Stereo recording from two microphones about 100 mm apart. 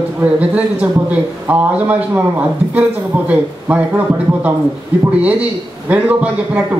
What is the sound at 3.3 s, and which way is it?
A man's voice, 15° right (ahead or behind).